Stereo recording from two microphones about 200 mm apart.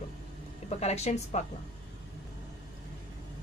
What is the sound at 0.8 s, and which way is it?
Speech, 35° left (ahead or behind).